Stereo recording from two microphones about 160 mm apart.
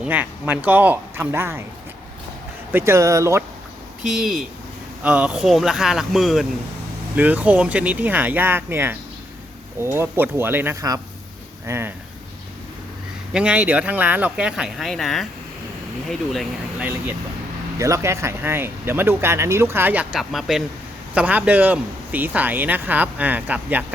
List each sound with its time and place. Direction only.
0.0 s speech: 10° right (ahead or behind)
2.7 s speech: 15° right (ahead or behind)
4.0 s speech: 5° right (ahead or behind)
13.3 s speech: 10° right (ahead or behind)
16.8 s speech: 15° right (ahead or behind)